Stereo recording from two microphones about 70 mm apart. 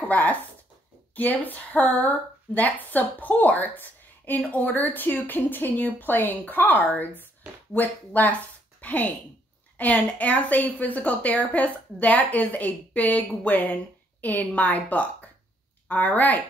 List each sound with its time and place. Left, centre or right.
0.1 s a woman's voice: left